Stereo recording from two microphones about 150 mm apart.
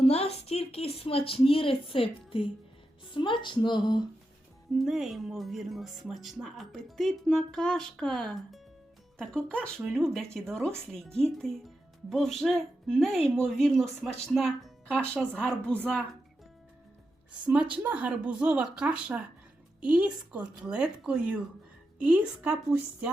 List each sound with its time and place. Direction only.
0.0 s a woman's voice: 45° left (ahead or behind)
4.8 s speech: centre (ahead or behind)
17.4 s speech: 10° right (ahead or behind)